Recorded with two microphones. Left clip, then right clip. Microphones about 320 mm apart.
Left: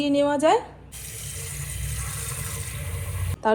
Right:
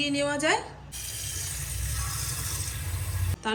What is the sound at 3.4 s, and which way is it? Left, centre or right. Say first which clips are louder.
Speech: left 8 dB; centre.